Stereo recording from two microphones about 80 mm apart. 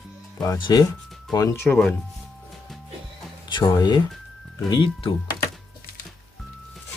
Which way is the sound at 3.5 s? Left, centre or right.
Left.